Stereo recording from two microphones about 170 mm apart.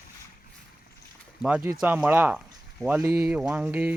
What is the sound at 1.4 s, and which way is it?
Speech, 10° right (ahead or behind).